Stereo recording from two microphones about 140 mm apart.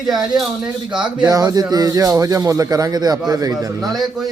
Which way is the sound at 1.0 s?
30° right (ahead or behind).